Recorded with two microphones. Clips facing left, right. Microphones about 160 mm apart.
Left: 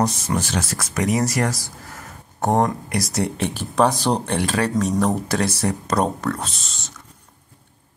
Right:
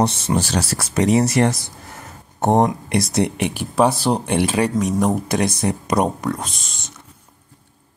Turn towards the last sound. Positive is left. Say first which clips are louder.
# even
turn(degrees=-15)  # may be behind; listen again after turning